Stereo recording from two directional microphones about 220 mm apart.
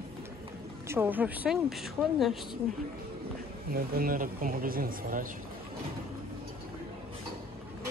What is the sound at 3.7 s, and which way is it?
Speech, 40° right (ahead or behind).